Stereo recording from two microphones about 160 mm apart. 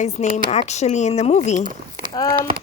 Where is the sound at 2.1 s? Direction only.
25° left (ahead or behind).